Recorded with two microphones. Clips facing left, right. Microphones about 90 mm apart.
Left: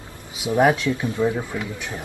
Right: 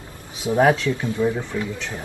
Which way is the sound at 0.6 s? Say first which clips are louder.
Even; 15° left (ahead or behind).